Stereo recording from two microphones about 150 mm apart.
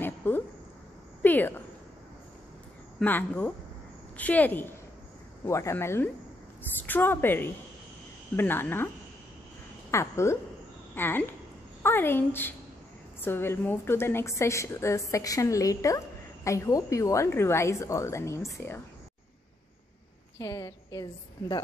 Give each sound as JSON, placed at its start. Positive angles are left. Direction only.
{"t": 0.0, "sound": "a sound", "side_deg": 15}
{"t": 3.0, "sound": "a woman's voice", "side_deg": 10}
{"t": 20.3, "sound": "a woman's voice", "side_deg": 20}